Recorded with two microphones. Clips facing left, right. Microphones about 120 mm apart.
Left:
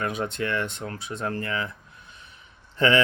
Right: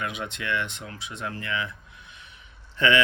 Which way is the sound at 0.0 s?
40° left (ahead or behind).